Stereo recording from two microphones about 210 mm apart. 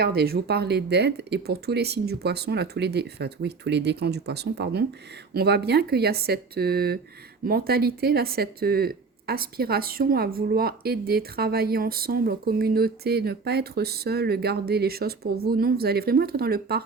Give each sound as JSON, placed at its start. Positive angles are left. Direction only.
{"t": 0.0, "sound": "speech", "side_deg": -50}